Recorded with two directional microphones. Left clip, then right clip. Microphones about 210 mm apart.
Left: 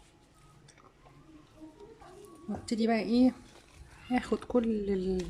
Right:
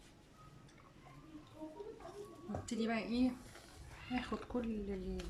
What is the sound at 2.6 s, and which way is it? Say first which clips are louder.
A woman's voice: left 10 dB; 25° left (ahead or behind).